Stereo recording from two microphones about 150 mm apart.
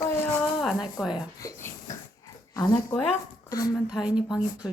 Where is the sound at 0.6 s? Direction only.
Centre (ahead or behind).